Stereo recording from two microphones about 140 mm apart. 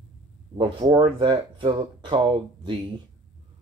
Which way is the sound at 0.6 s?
35° right (ahead or behind).